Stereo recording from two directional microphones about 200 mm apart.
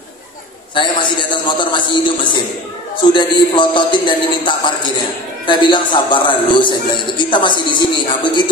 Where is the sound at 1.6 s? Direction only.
25° left (ahead or behind).